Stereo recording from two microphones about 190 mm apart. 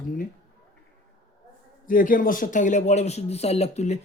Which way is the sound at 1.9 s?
45° left (ahead or behind).